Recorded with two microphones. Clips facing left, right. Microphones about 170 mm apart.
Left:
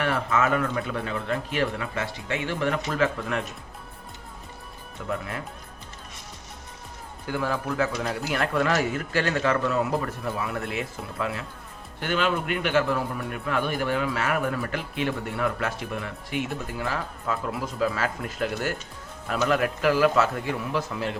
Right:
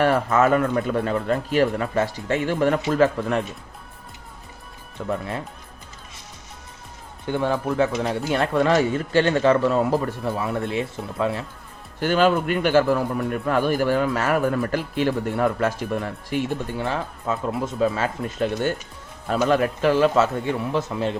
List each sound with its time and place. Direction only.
0.0 s a man's voice: 40° right (ahead or behind)
4.9 s speech: 30° right (ahead or behind)
7.3 s speech: 25° right (ahead or behind)
11.9 s a man's voice: 40° right (ahead or behind)
16.6 s speech: 25° right (ahead or behind)